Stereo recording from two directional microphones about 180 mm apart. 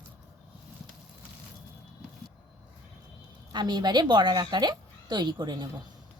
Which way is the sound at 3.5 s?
25° right (ahead or behind).